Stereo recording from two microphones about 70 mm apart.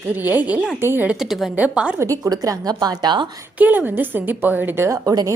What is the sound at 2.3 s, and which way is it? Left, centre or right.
Speech, right.